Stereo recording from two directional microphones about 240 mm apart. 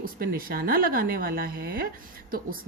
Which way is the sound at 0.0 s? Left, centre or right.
Right.